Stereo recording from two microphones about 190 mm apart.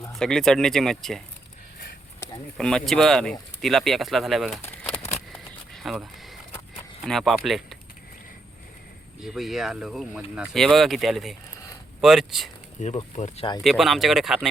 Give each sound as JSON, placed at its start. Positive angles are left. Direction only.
{"t": 0.1, "sound": "speech", "side_deg": 5}
{"t": 2.6, "sound": "speech", "side_deg": 5}
{"t": 4.6, "sound": "crumpling", "side_deg": 10}
{"t": 5.3, "sound": "a sound", "side_deg": 0}
{"t": 7.0, "sound": "speech", "side_deg": 0}
{"t": 9.2, "sound": "speech", "side_deg": 0}
{"t": 12.8, "sound": "speech", "side_deg": 35}
{"t": 13.6, "sound": "speech", "side_deg": 0}